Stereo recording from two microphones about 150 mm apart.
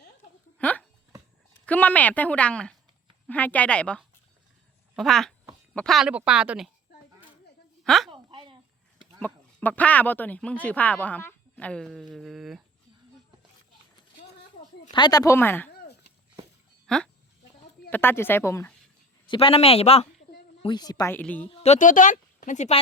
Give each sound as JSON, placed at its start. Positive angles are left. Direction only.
{"t": 0.6, "sound": "a sound", "side_deg": 10}
{"t": 1.6, "sound": "speech", "side_deg": 10}
{"t": 7.9, "sound": "a woman's voice", "side_deg": 0}
{"t": 8.1, "sound": "a sound", "side_deg": -35}
{"t": 9.2, "sound": "speech", "side_deg": 10}
{"t": 14.9, "sound": "speech", "side_deg": 30}
{"t": 16.8, "sound": "speech", "side_deg": 5}
{"t": 19.3, "sound": "speech", "side_deg": 35}
{"t": 20.6, "sound": "speech", "side_deg": 30}
{"t": 21.1, "sound": "speech", "side_deg": 10}
{"t": 21.5, "sound": "a woman's voice", "side_deg": 45}